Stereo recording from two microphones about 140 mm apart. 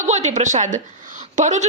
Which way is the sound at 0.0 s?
55° right (ahead or behind).